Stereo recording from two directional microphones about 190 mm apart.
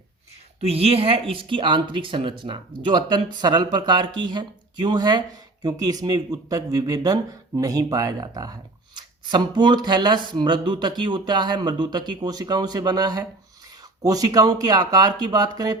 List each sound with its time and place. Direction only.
0.6 s a woman's voice: 30° right (ahead or behind)